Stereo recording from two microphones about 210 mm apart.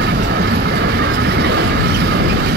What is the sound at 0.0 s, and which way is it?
Vehicle, 55° right (ahead or behind).